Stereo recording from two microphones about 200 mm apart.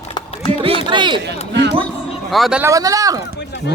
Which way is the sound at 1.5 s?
55° right (ahead or behind).